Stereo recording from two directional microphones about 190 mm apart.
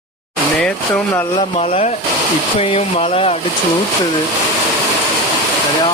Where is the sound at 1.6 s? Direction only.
35° left (ahead or behind).